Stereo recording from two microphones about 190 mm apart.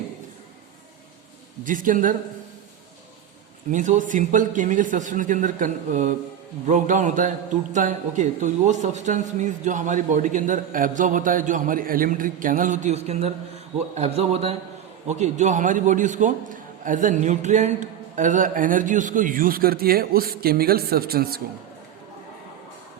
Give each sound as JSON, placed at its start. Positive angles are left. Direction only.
{"t": 1.6, "sound": "a man's voice", "side_deg": -45}
{"t": 3.7, "sound": "a man's voice", "side_deg": -40}